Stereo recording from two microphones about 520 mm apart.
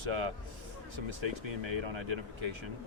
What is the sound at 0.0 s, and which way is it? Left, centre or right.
Speech, right.